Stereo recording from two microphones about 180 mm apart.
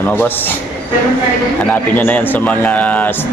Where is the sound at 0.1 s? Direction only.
10° left (ahead or behind).